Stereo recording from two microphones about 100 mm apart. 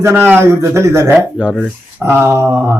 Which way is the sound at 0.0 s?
25° right (ahead or behind).